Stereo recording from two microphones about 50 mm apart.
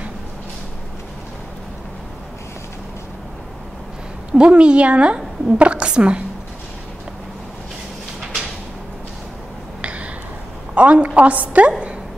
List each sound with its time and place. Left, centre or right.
4.3 s a woman's voice: right
9.8 s a sound: right
10.7 s a woman's voice: right